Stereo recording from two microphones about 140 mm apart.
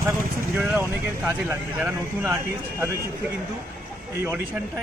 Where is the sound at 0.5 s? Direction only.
15° right (ahead or behind).